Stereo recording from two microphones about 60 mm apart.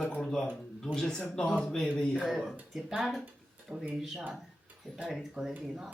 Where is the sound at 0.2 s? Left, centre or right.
Centre.